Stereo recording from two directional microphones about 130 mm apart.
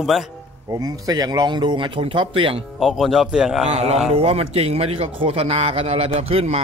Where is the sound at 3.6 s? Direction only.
55° right (ahead or behind).